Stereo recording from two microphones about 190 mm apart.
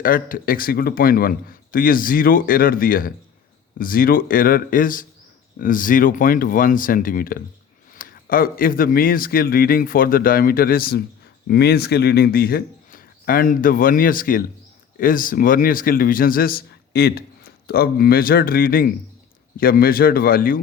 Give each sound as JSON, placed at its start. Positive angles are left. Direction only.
{"t": 0.0, "sound": "a man's voice", "side_deg": 50}